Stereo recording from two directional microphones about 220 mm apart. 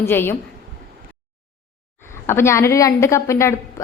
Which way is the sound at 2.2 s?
10° left (ahead or behind).